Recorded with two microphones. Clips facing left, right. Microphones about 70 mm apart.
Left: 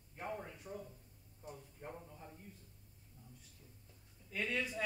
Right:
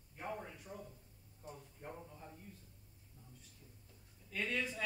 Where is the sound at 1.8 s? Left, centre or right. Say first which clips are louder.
Even; centre.